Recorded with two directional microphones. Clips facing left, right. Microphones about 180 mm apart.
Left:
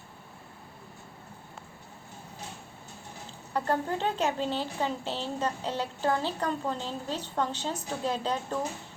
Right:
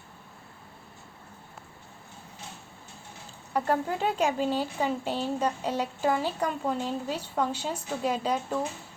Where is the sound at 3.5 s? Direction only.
10° right (ahead or behind).